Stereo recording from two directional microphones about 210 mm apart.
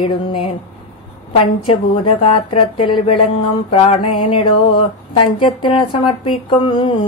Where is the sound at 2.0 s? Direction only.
25° left (ahead or behind).